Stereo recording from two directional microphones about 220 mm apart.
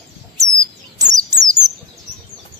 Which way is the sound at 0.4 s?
15° right (ahead or behind).